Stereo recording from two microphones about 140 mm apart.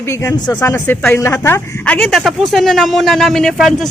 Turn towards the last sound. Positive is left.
turn(degrees=0)  # may be behind; listen again after turning